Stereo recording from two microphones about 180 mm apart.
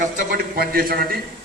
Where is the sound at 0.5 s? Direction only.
55° right (ahead or behind).